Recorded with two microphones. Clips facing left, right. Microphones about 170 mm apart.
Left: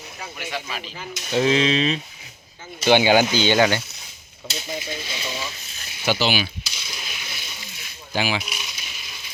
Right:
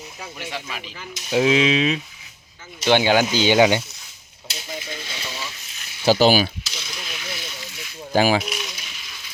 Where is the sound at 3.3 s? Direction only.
10° right (ahead or behind).